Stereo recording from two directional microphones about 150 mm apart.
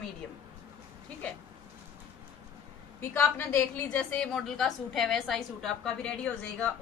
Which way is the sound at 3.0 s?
15° left (ahead or behind).